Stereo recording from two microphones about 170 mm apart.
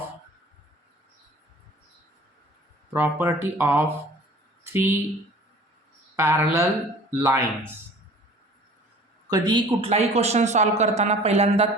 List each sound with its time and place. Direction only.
2.9 s speech: 15° right (ahead or behind)
6.1 s speech: 15° right (ahead or behind)
9.3 s speech: 25° right (ahead or behind)